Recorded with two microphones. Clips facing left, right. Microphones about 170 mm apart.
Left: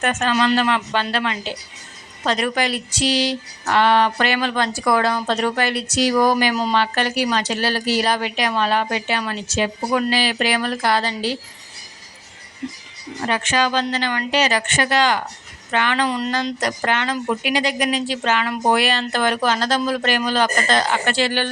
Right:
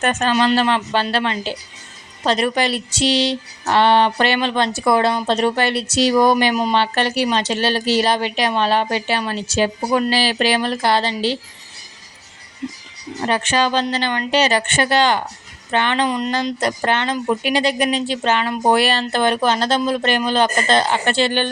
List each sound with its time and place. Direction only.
0.0 s a woman's voice: 35° right (ahead or behind)
13.2 s speech: 30° right (ahead or behind)